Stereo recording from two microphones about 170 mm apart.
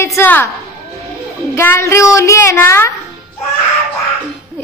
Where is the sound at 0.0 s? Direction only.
15° left (ahead or behind).